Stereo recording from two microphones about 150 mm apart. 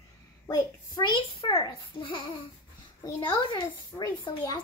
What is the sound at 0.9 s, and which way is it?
A child's voice, 35° left (ahead or behind).